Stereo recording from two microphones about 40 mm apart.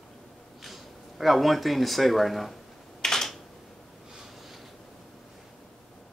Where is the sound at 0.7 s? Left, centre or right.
Centre.